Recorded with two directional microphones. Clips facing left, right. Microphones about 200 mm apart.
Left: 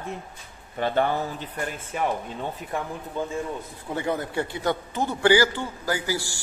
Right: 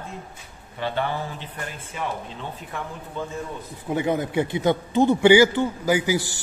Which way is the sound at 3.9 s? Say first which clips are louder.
Right 4 dB; 15° right (ahead or behind).